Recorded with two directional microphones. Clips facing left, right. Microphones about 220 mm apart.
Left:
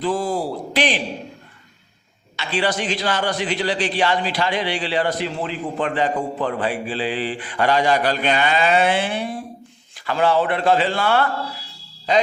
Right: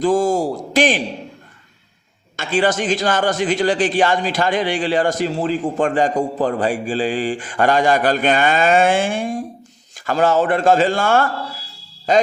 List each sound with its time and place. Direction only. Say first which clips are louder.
0.0 s a man's voice: right 6 dB; 45° right (ahead or behind)
2.3 s a man's voice: right 4 dB; 50° right (ahead or behind)